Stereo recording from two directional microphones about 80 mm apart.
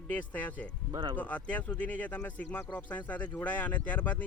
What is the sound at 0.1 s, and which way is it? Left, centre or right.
Speech, left.